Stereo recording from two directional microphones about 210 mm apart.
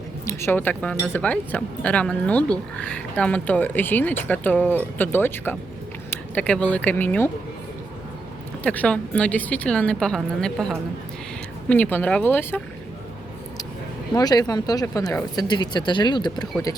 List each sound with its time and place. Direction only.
0.3 s speech: 10° left (ahead or behind)
8.6 s a woman's voice: 5° left (ahead or behind)
14.1 s speech: 20° left (ahead or behind)